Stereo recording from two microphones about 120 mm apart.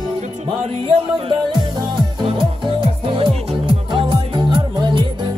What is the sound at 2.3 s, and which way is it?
Music, 45° right (ahead or behind).